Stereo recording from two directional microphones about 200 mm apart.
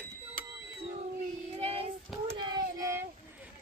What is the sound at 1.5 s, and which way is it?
Child singing, 30° right (ahead or behind).